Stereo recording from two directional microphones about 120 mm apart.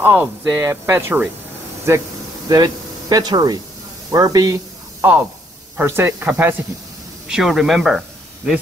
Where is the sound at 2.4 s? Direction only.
35° right (ahead or behind).